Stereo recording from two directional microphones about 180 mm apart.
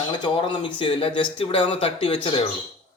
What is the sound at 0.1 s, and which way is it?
A man's voice, 25° left (ahead or behind).